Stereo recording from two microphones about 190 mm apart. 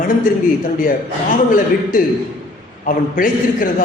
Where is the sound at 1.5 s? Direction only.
45° left (ahead or behind).